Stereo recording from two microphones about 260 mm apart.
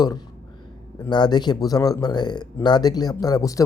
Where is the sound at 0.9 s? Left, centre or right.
Centre.